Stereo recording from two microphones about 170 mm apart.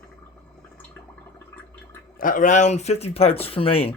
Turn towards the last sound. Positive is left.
turn(degrees=35)  # may be behind; listen again after turning